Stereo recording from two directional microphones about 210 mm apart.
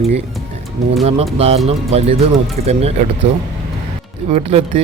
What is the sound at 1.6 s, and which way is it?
Speech, 30° right (ahead or behind).